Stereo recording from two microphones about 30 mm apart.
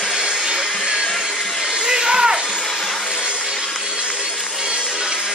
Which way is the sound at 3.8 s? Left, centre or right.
Right.